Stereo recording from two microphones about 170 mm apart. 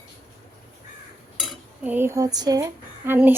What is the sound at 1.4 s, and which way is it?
Dishes, 10° right (ahead or behind).